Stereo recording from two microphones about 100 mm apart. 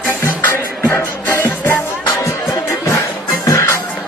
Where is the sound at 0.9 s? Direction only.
20° left (ahead or behind).